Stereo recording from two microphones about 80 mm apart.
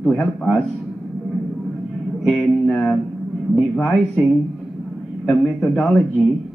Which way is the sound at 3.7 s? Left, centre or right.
Centre.